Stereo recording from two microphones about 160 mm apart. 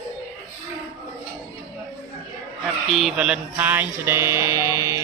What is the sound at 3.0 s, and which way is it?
Speech, 5° right (ahead or behind).